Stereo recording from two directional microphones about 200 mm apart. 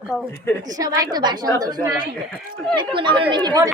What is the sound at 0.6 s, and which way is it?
Speech, 20° right (ahead or behind).